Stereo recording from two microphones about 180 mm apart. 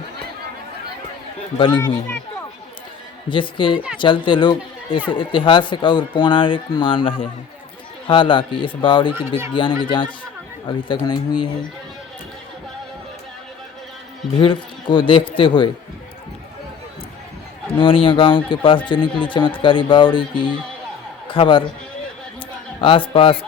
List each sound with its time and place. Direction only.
1.5 s speech: 30° left (ahead or behind)
1.8 s speech: 15° left (ahead or behind)
3.2 s speech: 25° left (ahead or behind)
14.3 s speech: 30° left (ahead or behind)
17.7 s speech: 30° left (ahead or behind)
22.8 s speech: 30° left (ahead or behind)